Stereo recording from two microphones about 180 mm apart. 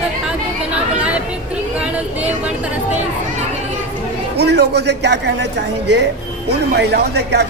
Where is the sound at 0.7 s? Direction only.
5° right (ahead or behind).